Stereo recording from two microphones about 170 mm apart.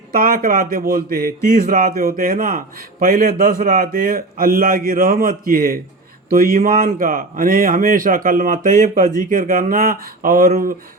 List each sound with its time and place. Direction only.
0.1 s speech: 55° right (ahead or behind)